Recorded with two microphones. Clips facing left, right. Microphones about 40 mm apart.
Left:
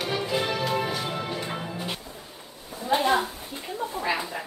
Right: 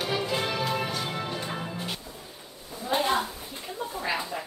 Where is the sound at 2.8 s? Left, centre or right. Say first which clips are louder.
Left 3 dB; left.